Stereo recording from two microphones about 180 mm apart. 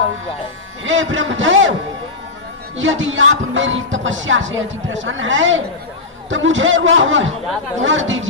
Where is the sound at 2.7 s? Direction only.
90° right.